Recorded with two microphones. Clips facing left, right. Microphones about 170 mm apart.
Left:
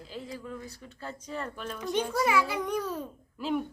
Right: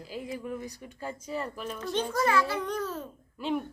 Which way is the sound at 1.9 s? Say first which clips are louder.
Even; 10° left (ahead or behind).